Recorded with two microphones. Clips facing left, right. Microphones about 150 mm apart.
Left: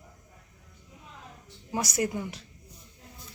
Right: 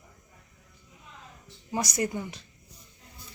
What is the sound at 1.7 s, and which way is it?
Speech, 5° left (ahead or behind).